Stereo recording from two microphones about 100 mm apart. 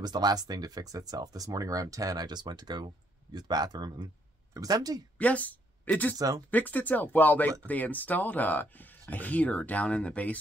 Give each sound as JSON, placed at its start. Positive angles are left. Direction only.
{"t": 0.0, "sound": "speech", "side_deg": -45}
{"t": 5.1, "sound": "speech", "side_deg": 15}
{"t": 6.1, "sound": "speech", "side_deg": -35}
{"t": 6.5, "sound": "speech", "side_deg": 15}